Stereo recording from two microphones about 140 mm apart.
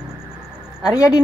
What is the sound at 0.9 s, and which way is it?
Speech, 25° left (ahead or behind).